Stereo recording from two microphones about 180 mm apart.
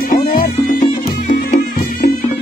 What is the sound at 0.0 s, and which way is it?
Music, 50° left (ahead or behind).